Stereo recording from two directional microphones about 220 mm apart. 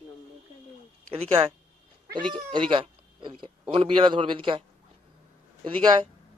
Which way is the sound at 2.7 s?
20° right (ahead or behind).